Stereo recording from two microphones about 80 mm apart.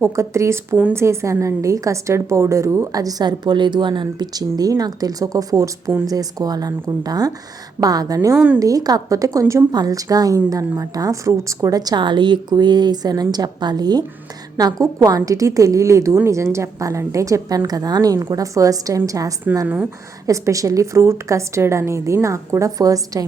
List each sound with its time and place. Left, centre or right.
0.0 s a woman's voice: right
2.9 s a woman's voice: right
17.7 s a woman's voice: right
19.6 s speech: centre
20.2 s a woman's voice: right